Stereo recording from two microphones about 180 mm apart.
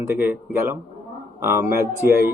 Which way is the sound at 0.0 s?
10° right (ahead or behind).